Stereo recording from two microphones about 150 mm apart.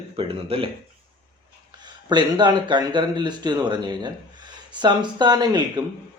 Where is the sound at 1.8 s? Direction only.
30° right (ahead or behind).